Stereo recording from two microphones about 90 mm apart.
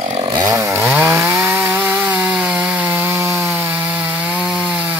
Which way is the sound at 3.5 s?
15° right (ahead or behind).